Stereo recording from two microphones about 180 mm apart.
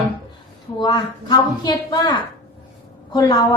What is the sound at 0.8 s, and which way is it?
Speech, 25° left (ahead or behind).